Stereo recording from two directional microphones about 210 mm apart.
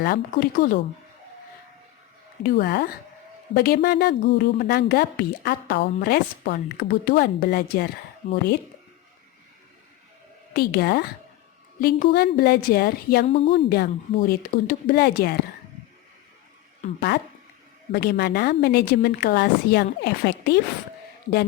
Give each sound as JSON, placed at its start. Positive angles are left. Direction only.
{"t": 0.0, "sound": "a woman's voice", "side_deg": 45}
{"t": 2.4, "sound": "a woman's voice", "side_deg": 45}
{"t": 8.2, "sound": "speech", "side_deg": 30}
{"t": 10.5, "sound": "a woman's voice", "side_deg": 50}
{"t": 13.2, "sound": "a woman's voice", "side_deg": 30}
{"t": 13.7, "sound": "a woman's voice", "side_deg": 50}
{"t": 17.9, "sound": "a woman's voice", "side_deg": 50}